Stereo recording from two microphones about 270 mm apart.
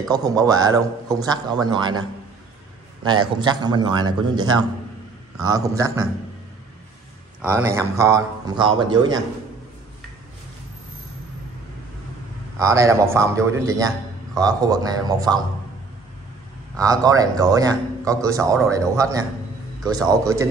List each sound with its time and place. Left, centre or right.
0.1 s a man's voice: centre
3.0 s a man's voice: centre
7.4 s a man's voice: centre
12.5 s a man's voice: centre
16.7 s a man's voice: centre